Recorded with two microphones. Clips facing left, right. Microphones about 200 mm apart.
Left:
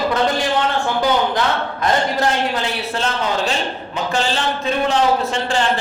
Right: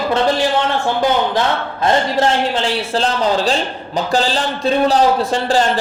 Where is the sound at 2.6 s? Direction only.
35° right (ahead or behind).